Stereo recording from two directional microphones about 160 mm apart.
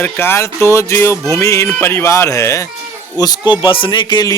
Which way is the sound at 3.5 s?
30° left (ahead or behind).